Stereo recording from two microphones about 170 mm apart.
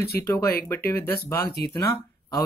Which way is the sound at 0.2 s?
15° left (ahead or behind).